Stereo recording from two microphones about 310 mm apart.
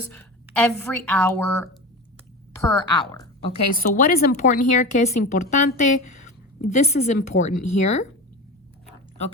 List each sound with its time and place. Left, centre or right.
0.1 s a woman's voice: centre
3.8 s speech: left